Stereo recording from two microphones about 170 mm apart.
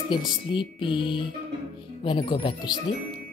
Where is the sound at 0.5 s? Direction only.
30° left (ahead or behind).